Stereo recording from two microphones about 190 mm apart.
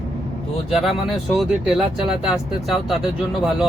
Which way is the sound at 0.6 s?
Centre (ahead or behind).